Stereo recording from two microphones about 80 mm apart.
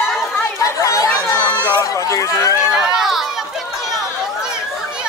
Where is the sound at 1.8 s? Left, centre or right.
Left.